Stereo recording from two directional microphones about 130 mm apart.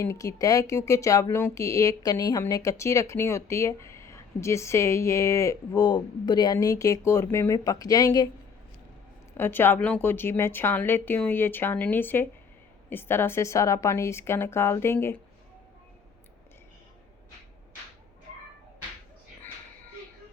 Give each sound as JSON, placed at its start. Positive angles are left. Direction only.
{"t": 0.0, "sound": "speech", "side_deg": 25}
{"t": 9.4, "sound": "a woman's voice", "side_deg": 15}